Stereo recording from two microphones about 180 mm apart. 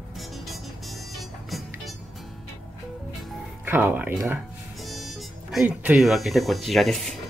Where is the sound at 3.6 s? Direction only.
10° right (ahead or behind).